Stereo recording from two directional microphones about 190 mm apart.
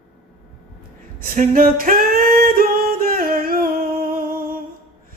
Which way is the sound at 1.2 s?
50° right (ahead or behind).